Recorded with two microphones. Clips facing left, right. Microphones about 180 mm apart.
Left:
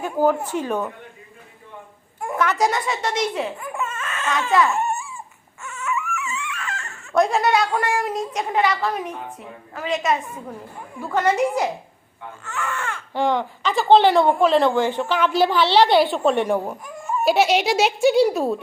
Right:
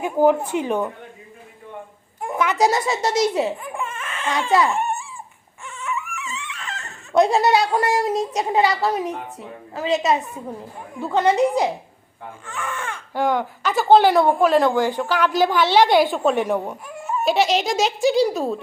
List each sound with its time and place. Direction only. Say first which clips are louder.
0.0 s speech: right 3 dB; 15° right (ahead or behind)
2.2 s a sound: even; 10° right (ahead or behind)
2.6 s speech: right 3 dB; 35° right (ahead or behind)
3.4 s laughter: right 2 dB; 15° right (ahead or behind)
5.6 s dog: left 2 dB; 15° right (ahead or behind)
6.1 s a sound: left 4 dB; 20° right (ahead or behind)
7.3 s speech: right 2 dB; 35° right (ahead or behind)
8.4 s a woman's voice: right 1 dB; 20° right (ahead or behind)
8.6 s speech: right 2 dB; 40° right (ahead or behind)
9.7 s a woman's voice: right 3 dB; 20° right (ahead or behind)
17.2 s speech: left 1 dB; 5° left (ahead or behind)